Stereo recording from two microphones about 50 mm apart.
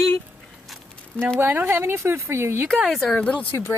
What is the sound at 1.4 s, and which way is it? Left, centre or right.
Speech, right.